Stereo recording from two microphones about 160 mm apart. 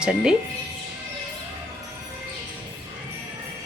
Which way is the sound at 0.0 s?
5° right (ahead or behind).